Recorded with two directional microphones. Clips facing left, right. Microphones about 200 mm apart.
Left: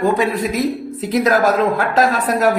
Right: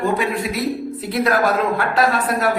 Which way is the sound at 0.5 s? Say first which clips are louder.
Left 3 dB; 45° left (ahead or behind).